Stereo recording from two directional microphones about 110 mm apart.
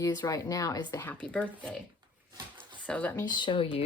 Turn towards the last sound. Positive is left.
turn(degrees=60)  # may be behind; listen again after turning